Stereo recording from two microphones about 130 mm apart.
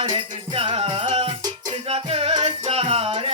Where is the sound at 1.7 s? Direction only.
50° right (ahead or behind).